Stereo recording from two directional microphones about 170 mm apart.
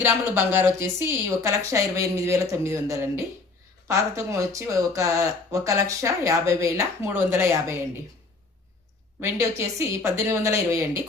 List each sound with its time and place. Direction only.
0.0 s speech: 15° right (ahead or behind)
9.2 s speech: 20° right (ahead or behind)